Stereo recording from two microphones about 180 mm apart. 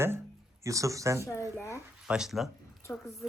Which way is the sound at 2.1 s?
5° right (ahead or behind).